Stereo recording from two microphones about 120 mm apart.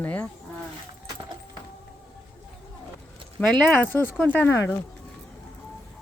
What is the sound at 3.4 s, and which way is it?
Speech, 10° left (ahead or behind).